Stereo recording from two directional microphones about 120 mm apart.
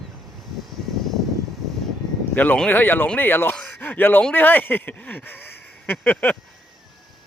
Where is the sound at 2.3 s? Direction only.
10° left (ahead or behind).